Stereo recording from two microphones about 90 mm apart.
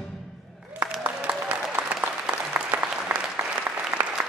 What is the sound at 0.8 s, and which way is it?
Applause, 15° right (ahead or behind).